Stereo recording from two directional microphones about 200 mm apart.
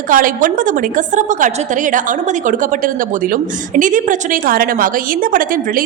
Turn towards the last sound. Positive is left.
turn(degrees=-45)  # may be behind; listen again after turning